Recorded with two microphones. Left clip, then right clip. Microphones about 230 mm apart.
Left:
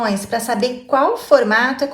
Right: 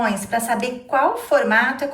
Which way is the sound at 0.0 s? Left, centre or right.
Centre.